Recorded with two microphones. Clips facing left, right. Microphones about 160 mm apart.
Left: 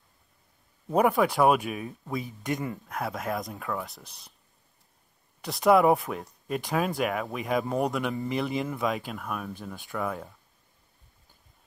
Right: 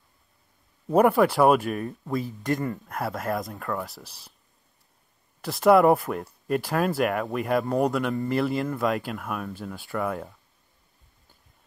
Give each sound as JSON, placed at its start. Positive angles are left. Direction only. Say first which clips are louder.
{"t": 0.9, "sound": "speech", "louder": "right 4 dB", "side_deg": -5}
{"t": 5.4, "sound": "speech", "louder": "right 3 dB", "side_deg": 0}